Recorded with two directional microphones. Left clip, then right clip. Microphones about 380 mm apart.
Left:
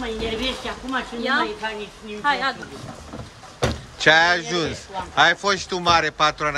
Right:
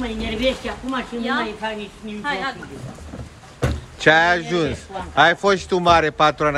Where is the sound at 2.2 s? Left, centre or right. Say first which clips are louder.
Left 3 dB; left.